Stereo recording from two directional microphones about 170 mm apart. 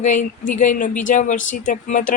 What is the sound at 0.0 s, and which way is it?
Speech, 45° left (ahead or behind).